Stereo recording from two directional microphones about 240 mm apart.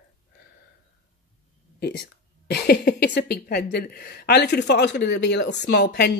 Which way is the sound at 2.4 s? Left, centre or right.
Left.